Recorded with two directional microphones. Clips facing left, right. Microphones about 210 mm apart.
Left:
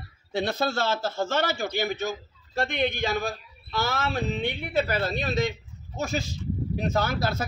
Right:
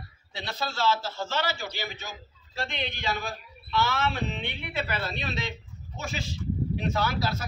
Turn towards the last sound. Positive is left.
turn(degrees=50)  # may be behind; listen again after turning